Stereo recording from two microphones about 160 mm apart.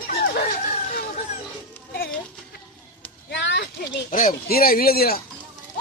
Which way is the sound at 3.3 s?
90° left.